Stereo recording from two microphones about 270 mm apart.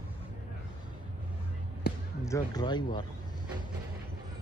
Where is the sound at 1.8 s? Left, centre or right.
Left.